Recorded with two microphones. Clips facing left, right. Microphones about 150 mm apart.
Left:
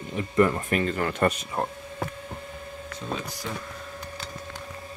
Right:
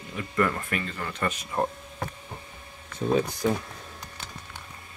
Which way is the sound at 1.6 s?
Centre (ahead or behind).